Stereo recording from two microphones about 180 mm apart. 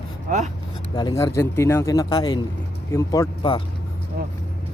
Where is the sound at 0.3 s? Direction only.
40° right (ahead or behind).